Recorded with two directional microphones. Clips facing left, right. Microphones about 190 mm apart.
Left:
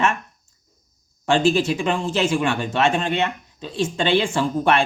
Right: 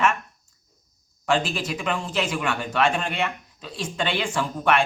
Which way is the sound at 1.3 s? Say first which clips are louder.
Left 6 dB; 25° left (ahead or behind).